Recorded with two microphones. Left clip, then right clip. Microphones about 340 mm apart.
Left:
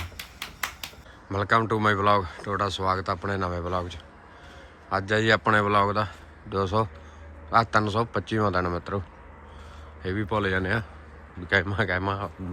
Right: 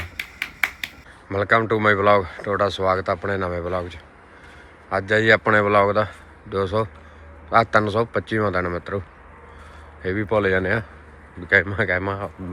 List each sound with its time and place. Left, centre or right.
1.3 s a man's voice: centre